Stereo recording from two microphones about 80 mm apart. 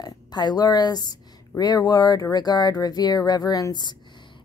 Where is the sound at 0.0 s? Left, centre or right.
Left.